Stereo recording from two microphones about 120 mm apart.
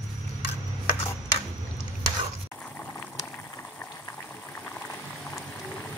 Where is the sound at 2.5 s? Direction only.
15° left (ahead or behind).